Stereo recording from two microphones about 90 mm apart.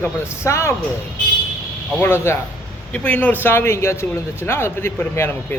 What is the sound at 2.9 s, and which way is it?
Speech, 15° left (ahead or behind).